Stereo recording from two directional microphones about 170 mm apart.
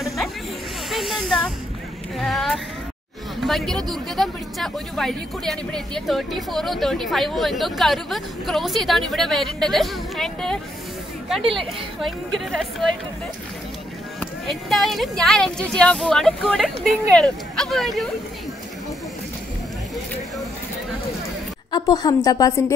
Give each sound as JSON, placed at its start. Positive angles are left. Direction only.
{"t": 0.8, "sound": "snake", "side_deg": 0}
{"t": 2.1, "sound": "speech", "side_deg": 0}
{"t": 12.3, "sound": "speech", "side_deg": 0}
{"t": 14.2, "sound": "speech", "side_deg": 0}
{"t": 21.7, "sound": "a woman's voice", "side_deg": 25}